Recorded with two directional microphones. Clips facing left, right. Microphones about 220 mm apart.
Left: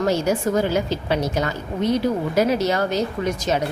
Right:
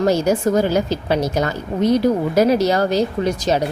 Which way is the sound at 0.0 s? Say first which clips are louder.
Right 4 dB; 40° right (ahead or behind).